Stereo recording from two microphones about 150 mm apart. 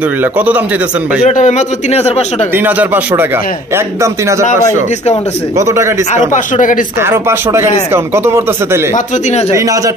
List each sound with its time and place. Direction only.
0.2 s speech: 10° right (ahead or behind)
1.3 s speech: 55° left (ahead or behind)
2.5 s speech: 15° right (ahead or behind)
5.6 s speech: 20° right (ahead or behind)
6.1 s speech: 55° left (ahead or behind)
7.0 s speech: 15° right (ahead or behind)